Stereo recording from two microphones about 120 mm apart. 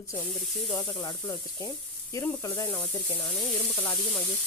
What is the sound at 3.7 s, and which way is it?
Sizzle, 15° left (ahead or behind).